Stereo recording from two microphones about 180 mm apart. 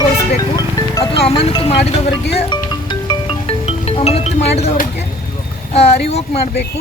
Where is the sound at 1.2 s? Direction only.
30° left (ahead or behind).